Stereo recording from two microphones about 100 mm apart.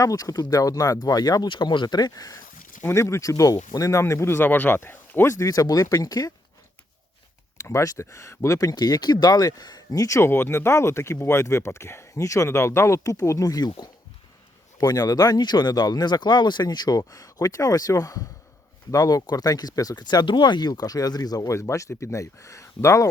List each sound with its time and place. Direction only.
0.0 s speech: 35° left (ahead or behind)
7.6 s speech: 30° left (ahead or behind)